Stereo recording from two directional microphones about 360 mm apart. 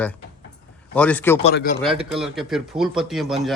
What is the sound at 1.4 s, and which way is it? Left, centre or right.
Speech, left.